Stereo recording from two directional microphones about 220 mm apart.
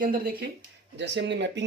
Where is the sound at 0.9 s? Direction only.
55° right (ahead or behind).